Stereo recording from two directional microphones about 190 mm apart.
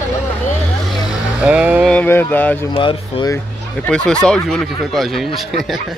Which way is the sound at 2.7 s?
25° left (ahead or behind).